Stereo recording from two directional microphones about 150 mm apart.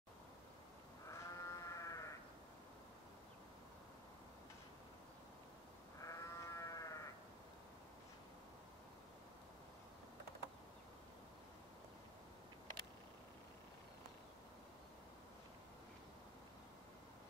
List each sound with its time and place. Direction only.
1.1 s sheep: 20° left (ahead or behind)
5.9 s sheep: 20° left (ahead or behind)